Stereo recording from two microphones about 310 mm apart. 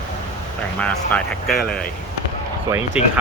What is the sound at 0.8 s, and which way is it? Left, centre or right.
Speech, centre.